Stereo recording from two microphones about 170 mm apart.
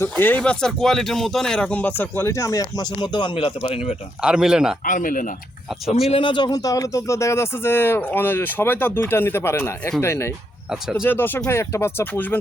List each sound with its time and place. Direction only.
0.0 s speech: 10° left (ahead or behind); by 3.8 s 35° left (ahead or behind)
4.2 s speech: 5° right (ahead or behind)
4.9 s speech: 50° left (ahead or behind)
5.9 s speech: 35° left (ahead or behind); by 10.3 s 15° left (ahead or behind)
10.7 s speech: 5° right (ahead or behind)
11.0 s speech: 10° left (ahead or behind)